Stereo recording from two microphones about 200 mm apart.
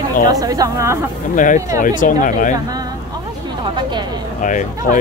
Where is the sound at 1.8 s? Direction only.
40° left (ahead or behind).